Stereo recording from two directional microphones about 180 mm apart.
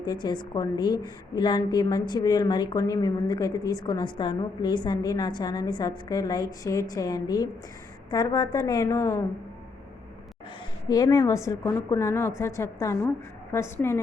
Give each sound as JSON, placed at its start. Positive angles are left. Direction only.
{"t": 0.0, "sound": "a woman's voice", "side_deg": 25}
{"t": 10.8, "sound": "a woman's voice", "side_deg": 20}